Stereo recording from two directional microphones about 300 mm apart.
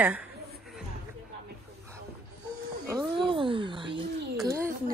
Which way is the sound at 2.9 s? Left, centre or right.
Centre.